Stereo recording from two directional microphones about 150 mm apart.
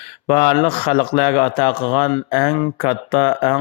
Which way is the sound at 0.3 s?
40° left (ahead or behind).